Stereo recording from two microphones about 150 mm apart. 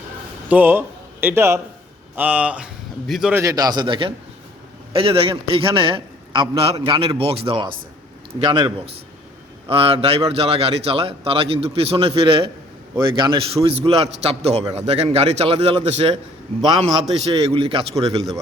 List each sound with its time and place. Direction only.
0.5 s a man's voice: 15° right (ahead or behind)
3.3 s a man's voice: 25° right (ahead or behind); by 16.1 s 45° right (ahead or behind)
17.2 s a man's voice: 40° right (ahead or behind)